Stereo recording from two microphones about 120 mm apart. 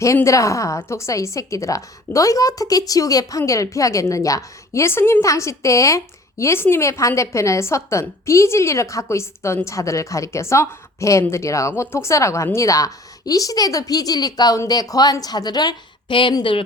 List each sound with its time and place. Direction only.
0.0 s a woman's voice: 25° left (ahead or behind); by 16.6 s 45° left (ahead or behind)